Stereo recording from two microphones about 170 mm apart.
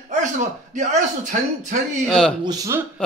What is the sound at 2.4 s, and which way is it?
Speech, 20° right (ahead or behind).